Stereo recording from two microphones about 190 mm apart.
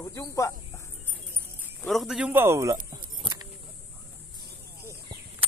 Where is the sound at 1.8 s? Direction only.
Centre (ahead or behind); by 3.0 s 15° right (ahead or behind).